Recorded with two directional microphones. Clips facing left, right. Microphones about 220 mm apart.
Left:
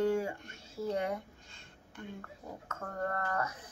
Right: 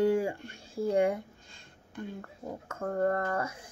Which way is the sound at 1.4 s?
35° right (ahead or behind).